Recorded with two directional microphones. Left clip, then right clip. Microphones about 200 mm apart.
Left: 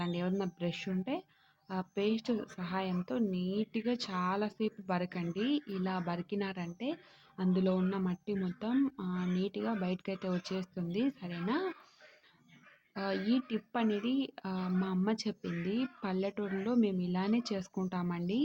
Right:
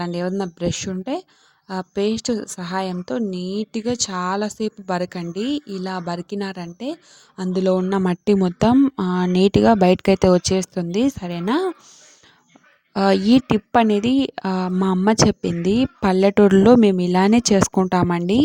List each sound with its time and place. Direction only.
0.0 s speech: 45° right (ahead or behind)
12.9 s speech: 55° right (ahead or behind)